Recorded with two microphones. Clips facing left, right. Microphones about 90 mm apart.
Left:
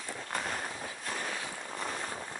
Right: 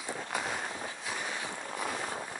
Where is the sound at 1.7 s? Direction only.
10° right (ahead or behind).